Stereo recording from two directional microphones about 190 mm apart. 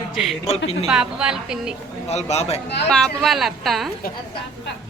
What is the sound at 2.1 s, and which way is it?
Speech, 35° left (ahead or behind).